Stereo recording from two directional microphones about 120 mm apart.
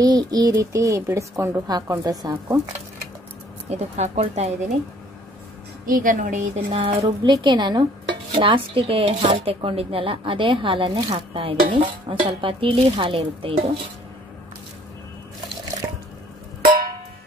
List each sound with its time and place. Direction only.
0.0 s speech: 35° right (ahead or behind)
3.7 s speech: 70° right (ahead or behind)
6.0 s a woman's voice: 90° right
6.8 s speech: 60° right (ahead or behind)
7.2 s dishes: 40° right (ahead or behind)
8.3 s speech: 50° right (ahead or behind)